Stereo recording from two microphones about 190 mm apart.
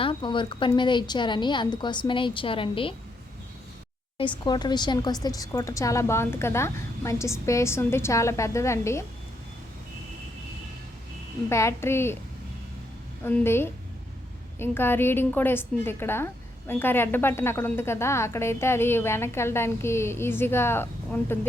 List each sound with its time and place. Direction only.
0.0 s a woman's voice: 25° left (ahead or behind)
4.2 s a woman's voice: 25° left (ahead or behind)
11.4 s a woman's voice: 15° left (ahead or behind)
13.2 s a woman's voice: 10° left (ahead or behind)